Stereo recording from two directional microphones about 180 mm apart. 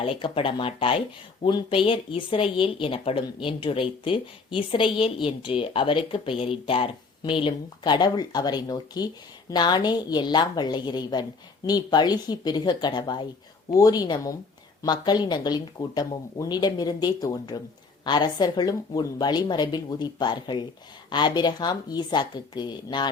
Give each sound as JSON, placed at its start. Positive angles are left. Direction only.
{"t": 0.0, "sound": "a woman's voice", "side_deg": 30}